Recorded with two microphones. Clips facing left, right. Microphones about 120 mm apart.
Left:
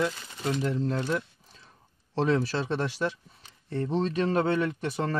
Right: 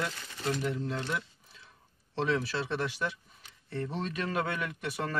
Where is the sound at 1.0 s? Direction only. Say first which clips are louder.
Left 6 dB; 40° left (ahead or behind).